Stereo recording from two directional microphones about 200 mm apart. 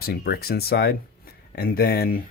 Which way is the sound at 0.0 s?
50° left (ahead or behind).